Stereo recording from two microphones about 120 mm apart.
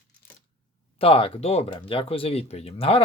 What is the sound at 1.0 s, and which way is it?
Speech, 50° left (ahead or behind).